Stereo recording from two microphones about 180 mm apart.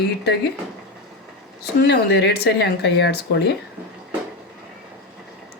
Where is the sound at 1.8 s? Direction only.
70° left (ahead or behind).